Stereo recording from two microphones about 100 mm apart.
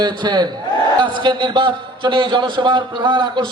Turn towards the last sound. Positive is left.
turn(degrees=-50)  # may be behind; listen again after turning